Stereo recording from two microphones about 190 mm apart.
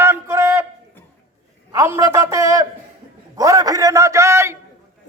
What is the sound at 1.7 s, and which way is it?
A man's voice, 15° right (ahead or behind).